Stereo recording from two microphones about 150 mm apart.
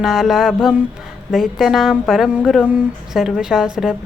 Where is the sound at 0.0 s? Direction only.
5° right (ahead or behind).